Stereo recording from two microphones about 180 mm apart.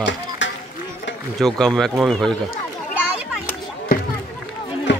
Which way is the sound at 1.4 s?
Centre (ahead or behind).